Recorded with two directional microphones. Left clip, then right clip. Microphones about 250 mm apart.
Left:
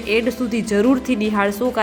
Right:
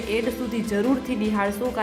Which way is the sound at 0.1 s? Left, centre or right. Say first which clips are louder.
Left 7 dB; centre.